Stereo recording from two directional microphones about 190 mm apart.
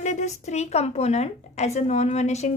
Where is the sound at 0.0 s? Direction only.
40° left (ahead or behind).